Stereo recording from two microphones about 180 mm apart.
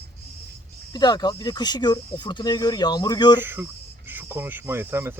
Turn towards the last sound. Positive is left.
turn(degrees=-15)  # may be behind; listen again after turning